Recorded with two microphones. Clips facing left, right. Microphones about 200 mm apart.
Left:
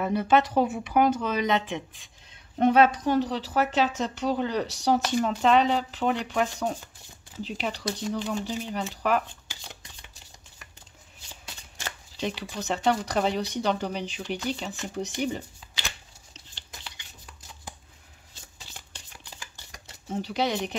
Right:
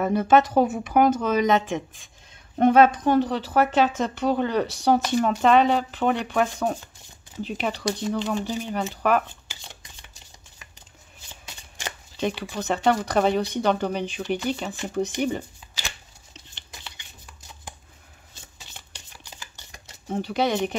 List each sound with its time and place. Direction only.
0.0 s speech: 45° right (ahead or behind)
12.2 s speech: 55° right (ahead or behind)
20.1 s speech: 55° right (ahead or behind)